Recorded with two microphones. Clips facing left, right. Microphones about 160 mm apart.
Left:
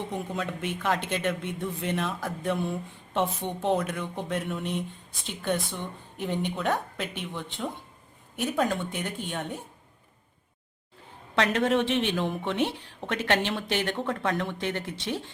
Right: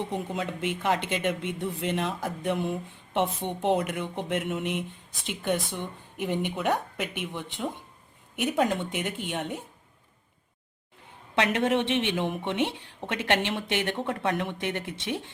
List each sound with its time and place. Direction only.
0.0 s speech: 15° right (ahead or behind)
11.3 s a woman's voice: 25° right (ahead or behind)